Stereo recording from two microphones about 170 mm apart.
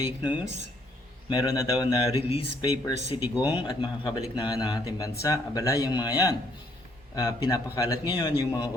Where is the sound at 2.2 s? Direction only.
35° left (ahead or behind).